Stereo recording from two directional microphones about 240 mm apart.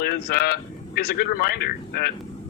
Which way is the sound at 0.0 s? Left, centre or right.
Left.